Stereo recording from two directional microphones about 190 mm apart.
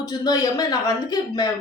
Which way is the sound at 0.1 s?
20° left (ahead or behind).